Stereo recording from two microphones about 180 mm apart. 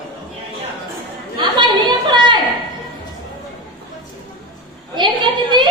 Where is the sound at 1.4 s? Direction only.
25° right (ahead or behind).